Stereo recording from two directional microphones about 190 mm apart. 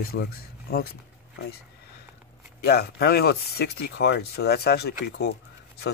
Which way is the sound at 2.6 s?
55° left (ahead or behind).